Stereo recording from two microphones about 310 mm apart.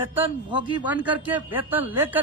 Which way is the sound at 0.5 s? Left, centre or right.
Centre.